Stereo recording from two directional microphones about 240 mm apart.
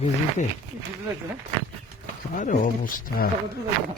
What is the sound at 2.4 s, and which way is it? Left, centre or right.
Speech, left.